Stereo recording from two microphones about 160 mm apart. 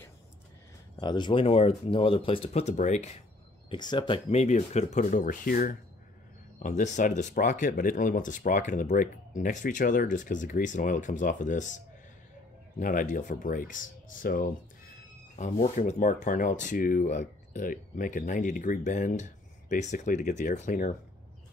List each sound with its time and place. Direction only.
0.9 s speech: 25° left (ahead or behind); by 3.1 s 45° left (ahead or behind)
3.7 s speech: 25° left (ahead or behind)
4.3 s speech: 45° left (ahead or behind); by 5.8 s 60° left (ahead or behind)
6.6 s speech: 50° left (ahead or behind)
12.7 s speech: 55° left (ahead or behind)